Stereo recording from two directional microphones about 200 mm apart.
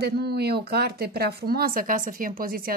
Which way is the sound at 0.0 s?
55° right (ahead or behind).